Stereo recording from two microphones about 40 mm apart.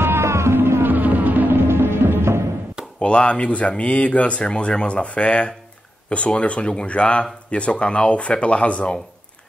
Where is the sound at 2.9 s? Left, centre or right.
Left.